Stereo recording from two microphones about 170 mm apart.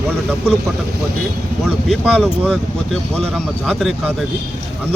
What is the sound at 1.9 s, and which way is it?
Speech, 5° left (ahead or behind).